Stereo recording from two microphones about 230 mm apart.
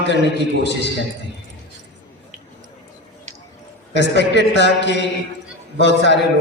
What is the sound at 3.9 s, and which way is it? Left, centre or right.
A man's voice, left.